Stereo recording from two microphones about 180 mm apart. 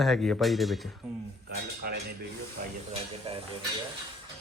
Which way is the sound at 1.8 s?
55° right (ahead or behind).